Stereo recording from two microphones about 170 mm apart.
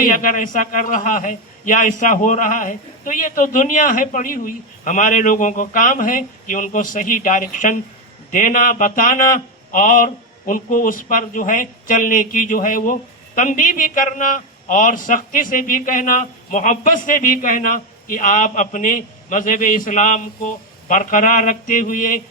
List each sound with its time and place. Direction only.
0.0 s speech: 50° left (ahead or behind)